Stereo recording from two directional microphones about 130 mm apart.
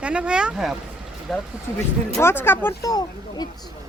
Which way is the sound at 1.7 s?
20° left (ahead or behind).